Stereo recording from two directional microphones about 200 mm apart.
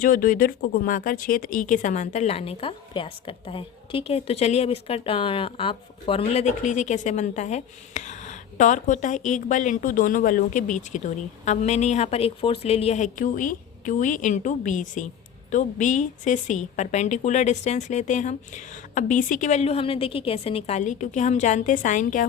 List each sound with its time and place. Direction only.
0.0 s speech: 45° left (ahead or behind)